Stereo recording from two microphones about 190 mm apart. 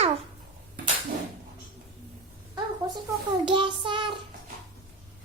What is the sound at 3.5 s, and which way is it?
Child singing, 25° right (ahead or behind).